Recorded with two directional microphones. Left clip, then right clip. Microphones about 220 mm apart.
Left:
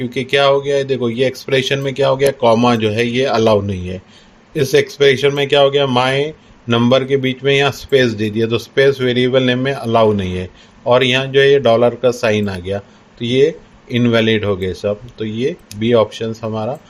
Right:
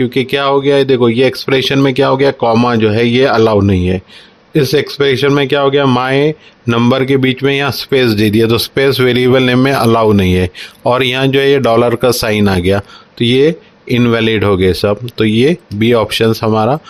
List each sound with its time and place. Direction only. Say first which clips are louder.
0.0 s speech: right 1 dB; 40° right (ahead or behind)